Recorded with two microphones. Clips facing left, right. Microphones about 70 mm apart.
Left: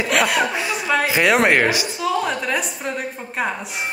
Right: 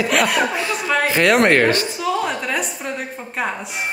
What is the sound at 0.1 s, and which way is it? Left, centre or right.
A woman's voice, centre.